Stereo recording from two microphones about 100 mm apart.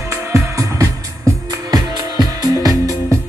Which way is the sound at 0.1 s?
30° right (ahead or behind).